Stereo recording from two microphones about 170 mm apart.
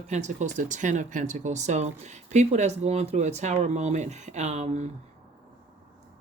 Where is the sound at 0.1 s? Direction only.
45° right (ahead or behind).